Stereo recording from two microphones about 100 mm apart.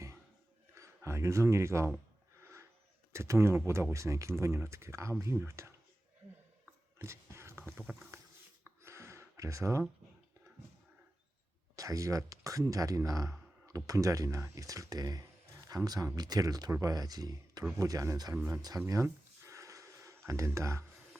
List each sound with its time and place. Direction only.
0.7 s speech: 30° right (ahead or behind)
2.4 s a sound: 25° right (ahead or behind)
3.1 s speech: 25° right (ahead or behind)
7.0 s a sound: 25° right (ahead or behind)
7.8 s rowboat: 20° right (ahead or behind)
8.8 s gasp: 30° right (ahead or behind)
11.8 s speech: 35° right (ahead or behind)
18.3 s speech: 20° right (ahead or behind)
18.9 s a sound: 30° right (ahead or behind)